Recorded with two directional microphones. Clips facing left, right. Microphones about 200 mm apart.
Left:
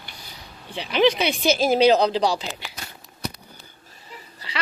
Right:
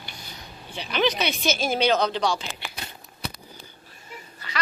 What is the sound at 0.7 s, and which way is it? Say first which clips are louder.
Speech: left 5 dB; 25° left (ahead or behind).